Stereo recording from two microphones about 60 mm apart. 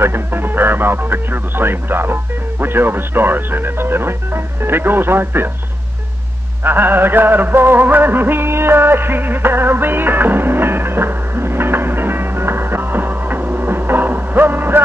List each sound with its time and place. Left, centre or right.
0.0 s speech: right
6.6 s music: right